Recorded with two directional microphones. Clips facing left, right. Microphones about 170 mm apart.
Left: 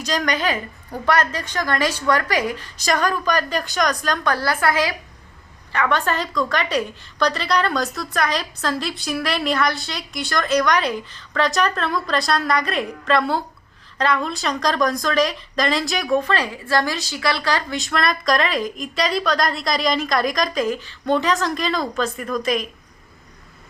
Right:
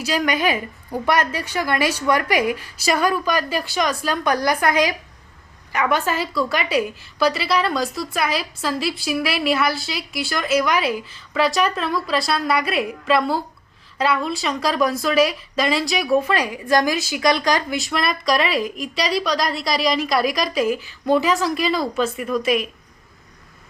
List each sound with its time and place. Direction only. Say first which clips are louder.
0.0 s a woman's voice: right 2 dB; 10° right (ahead or behind)
17.7 s a woman's voice: left 1 dB; 5° right (ahead or behind)